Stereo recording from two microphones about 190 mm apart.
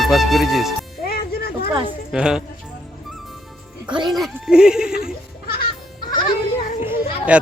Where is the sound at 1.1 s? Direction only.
55° left (ahead or behind).